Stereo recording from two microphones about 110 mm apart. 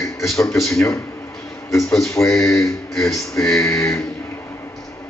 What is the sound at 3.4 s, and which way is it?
Speech, 5° left (ahead or behind).